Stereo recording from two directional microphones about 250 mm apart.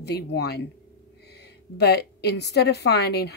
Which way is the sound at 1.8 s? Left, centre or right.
Left.